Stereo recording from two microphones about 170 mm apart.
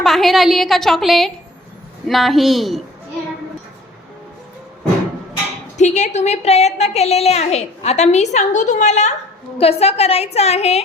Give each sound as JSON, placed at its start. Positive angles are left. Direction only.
{"t": 0.0, "sound": "a woman's voice", "side_deg": 0}
{"t": 5.7, "sound": "a woman's voice", "side_deg": 45}